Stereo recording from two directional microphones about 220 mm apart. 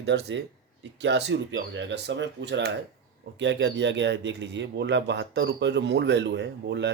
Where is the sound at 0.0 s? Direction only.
50° right (ahead or behind).